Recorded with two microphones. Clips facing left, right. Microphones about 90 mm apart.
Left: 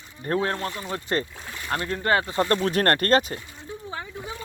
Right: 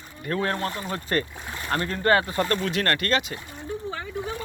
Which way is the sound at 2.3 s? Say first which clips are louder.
Left 2 dB; 30° left (ahead or behind).